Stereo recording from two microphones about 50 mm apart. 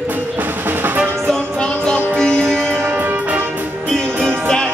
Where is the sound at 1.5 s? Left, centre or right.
Centre.